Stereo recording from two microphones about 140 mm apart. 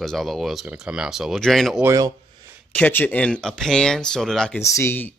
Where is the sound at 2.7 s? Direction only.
15° left (ahead or behind).